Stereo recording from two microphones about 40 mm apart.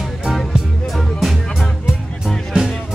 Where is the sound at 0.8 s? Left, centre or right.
Centre.